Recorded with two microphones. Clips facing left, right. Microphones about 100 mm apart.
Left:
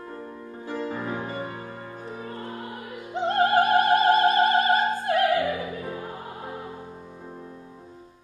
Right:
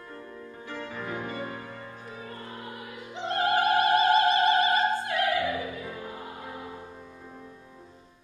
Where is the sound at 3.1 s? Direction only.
45° left (ahead or behind).